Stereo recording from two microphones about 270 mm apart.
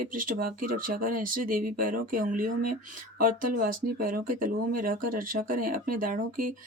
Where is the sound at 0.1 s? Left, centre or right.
Right.